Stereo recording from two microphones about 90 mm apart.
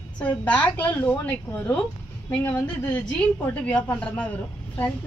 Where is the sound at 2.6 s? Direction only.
15° left (ahead or behind).